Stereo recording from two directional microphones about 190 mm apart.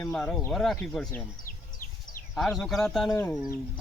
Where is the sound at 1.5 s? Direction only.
45° left (ahead or behind).